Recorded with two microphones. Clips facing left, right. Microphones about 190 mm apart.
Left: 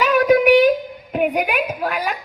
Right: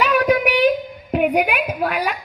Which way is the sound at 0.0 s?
45° left (ahead or behind).